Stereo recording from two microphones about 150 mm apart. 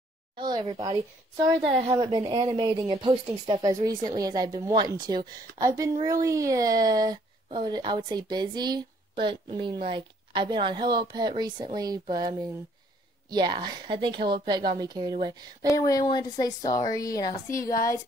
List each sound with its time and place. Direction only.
0.4 s speech: 30° right (ahead or behind)
2.0 s speech: 30° right (ahead or behind)
15.7 s a woman's voice: 25° left (ahead or behind)